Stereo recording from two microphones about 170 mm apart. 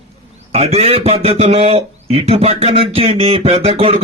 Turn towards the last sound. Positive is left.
turn(degrees=-35)  # may be behind; listen again after turning